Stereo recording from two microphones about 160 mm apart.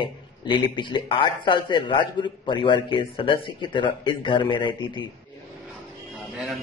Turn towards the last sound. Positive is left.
turn(degrees=0)  # may be behind; listen again after turning